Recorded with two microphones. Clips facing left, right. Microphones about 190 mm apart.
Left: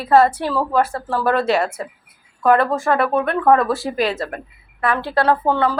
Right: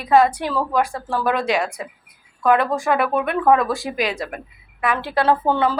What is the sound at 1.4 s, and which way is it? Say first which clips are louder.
Speech: left 3 dB; 10° right (ahead or behind).